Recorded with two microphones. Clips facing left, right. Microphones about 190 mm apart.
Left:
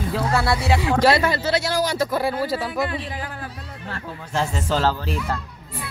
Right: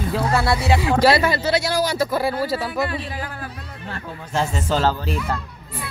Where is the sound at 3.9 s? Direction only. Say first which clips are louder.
Right 1 dB; 20° right (ahead or behind).